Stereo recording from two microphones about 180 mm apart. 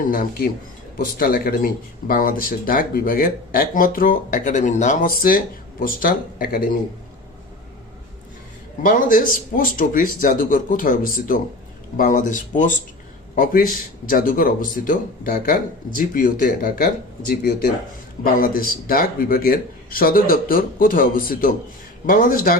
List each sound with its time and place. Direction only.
0.0 s speech: 50° left (ahead or behind)
8.8 s speech: 50° left (ahead or behind)